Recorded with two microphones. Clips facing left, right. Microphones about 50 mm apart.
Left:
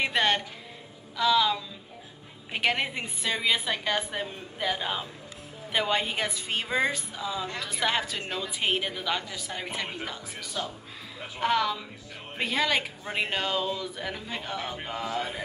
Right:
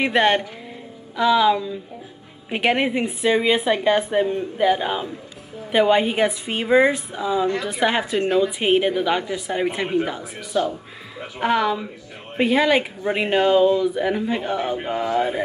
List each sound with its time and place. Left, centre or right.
0.0 s a woman's voice: right